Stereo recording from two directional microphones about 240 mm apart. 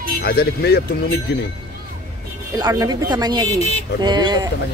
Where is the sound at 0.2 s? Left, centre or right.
Left.